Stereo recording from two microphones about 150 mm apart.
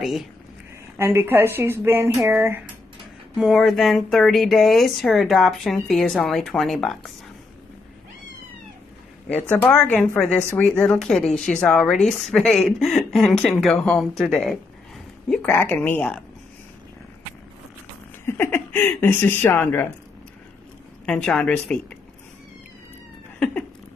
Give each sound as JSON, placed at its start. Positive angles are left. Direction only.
{"t": 0.0, "sound": "speech", "side_deg": 0}
{"t": 0.9, "sound": "a woman's voice", "side_deg": -15}
{"t": 3.3, "sound": "speech", "side_deg": 0}
{"t": 9.3, "sound": "speech", "side_deg": 10}
{"t": 15.5, "sound": "speech", "side_deg": 15}
{"t": 18.2, "sound": "speech", "side_deg": 15}
{"t": 21.0, "sound": "speech", "side_deg": 5}